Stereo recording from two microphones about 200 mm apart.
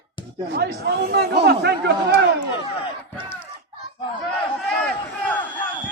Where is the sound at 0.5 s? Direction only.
55° right (ahead or behind).